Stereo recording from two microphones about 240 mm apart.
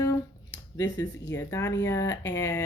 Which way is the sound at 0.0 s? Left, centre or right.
Centre.